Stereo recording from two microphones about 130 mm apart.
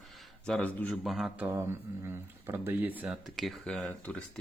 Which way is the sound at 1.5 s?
20° right (ahead or behind).